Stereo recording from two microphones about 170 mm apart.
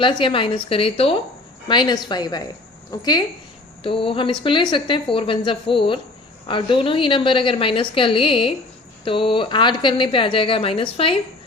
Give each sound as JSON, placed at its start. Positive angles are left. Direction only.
{"t": 0.0, "sound": "a woman's voice", "side_deg": 30}